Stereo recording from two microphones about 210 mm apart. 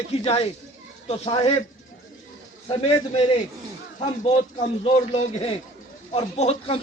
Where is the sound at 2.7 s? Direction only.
25° left (ahead or behind).